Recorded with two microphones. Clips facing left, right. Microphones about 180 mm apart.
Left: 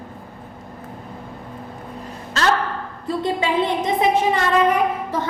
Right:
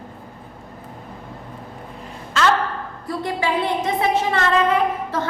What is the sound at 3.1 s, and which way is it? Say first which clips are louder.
A woman's voice: left 2 dB; 20° left (ahead or behind).